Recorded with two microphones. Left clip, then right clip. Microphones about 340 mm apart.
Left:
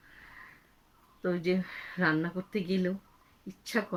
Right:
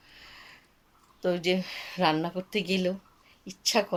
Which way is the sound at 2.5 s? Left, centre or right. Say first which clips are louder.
Right 4 dB; right.